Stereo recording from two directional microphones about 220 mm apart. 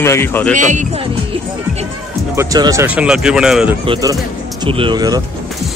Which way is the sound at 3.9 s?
15° right (ahead or behind).